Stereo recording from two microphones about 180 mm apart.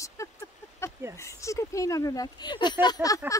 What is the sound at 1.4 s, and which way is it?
Speech, 15° left (ahead or behind).